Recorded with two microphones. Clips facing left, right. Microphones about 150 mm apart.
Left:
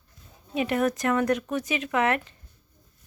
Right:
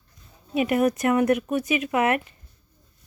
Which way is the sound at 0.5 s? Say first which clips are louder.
Right 3 dB; 15° right (ahead or behind).